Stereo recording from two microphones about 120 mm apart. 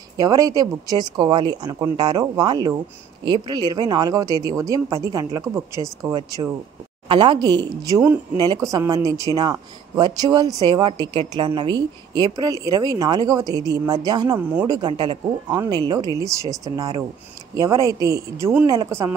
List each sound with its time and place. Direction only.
0.2 s speech: 30° right (ahead or behind)
11.0 s speech: 45° right (ahead or behind); by 19.1 s 20° right (ahead or behind)